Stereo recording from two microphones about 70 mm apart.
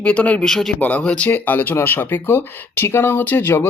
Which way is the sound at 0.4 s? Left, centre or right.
Centre.